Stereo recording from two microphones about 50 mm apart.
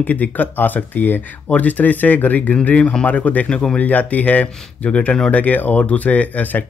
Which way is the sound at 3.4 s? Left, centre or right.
Left.